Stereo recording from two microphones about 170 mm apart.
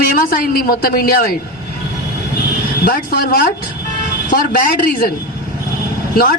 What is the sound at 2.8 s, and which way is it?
A woman's voice, 65° left (ahead or behind).